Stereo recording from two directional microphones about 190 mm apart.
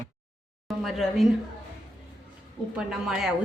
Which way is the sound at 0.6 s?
Centre (ahead or behind).